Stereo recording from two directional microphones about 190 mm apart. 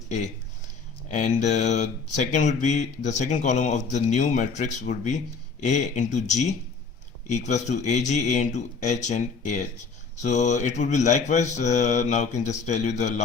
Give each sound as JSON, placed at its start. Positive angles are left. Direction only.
{"t": 1.0, "sound": "speech", "side_deg": 40}